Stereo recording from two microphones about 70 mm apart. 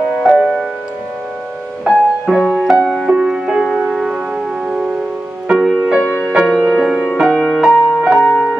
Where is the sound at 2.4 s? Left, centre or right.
Centre.